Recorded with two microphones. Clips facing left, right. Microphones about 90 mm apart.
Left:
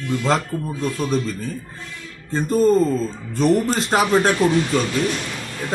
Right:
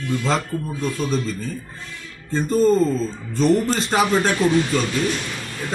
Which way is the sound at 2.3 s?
10° left (ahead or behind).